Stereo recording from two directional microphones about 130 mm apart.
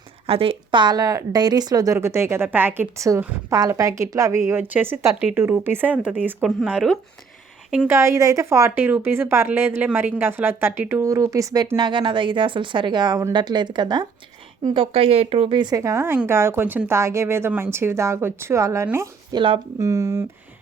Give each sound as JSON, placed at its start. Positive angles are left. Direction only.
{"t": 0.3, "sound": "a woman's voice", "side_deg": -45}
{"t": 7.9, "sound": "a woman's voice", "side_deg": -20}
{"t": 19.3, "sound": "speech", "side_deg": -40}
{"t": 19.8, "sound": "a woman's voice", "side_deg": -25}